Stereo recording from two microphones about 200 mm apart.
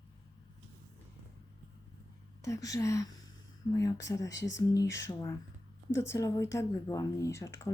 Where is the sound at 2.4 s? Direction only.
15° left (ahead or behind).